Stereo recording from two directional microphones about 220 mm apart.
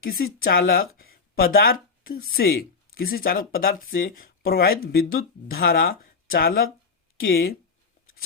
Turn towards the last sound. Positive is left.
turn(degrees=45)  # may be behind; listen again after turning